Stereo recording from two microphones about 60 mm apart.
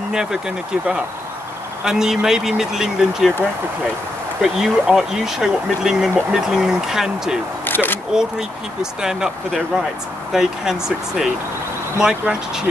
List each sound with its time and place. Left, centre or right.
0.1 s speech: centre
1.9 s speech: centre
4.4 s speech: centre
7.6 s single-lens reflex camera: left
8.1 s speech: centre
10.3 s speech: centre